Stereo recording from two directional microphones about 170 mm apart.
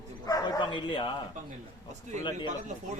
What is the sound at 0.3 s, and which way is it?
Bow-wow, 20° left (ahead or behind).